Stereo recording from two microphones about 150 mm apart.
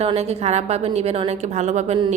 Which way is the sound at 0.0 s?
45° right (ahead or behind).